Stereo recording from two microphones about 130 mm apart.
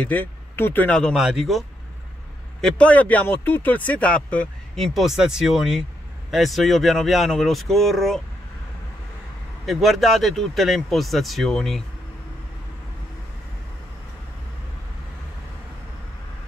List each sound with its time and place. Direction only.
0.0 s speech: 15° left (ahead or behind)
1.1 s speech: 5° right (ahead or behind)
2.6 s speech: 10° left (ahead or behind)
9.7 s speech: centre (ahead or behind)